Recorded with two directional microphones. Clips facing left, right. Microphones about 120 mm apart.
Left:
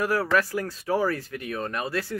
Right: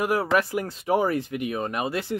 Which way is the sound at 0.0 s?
20° right (ahead or behind).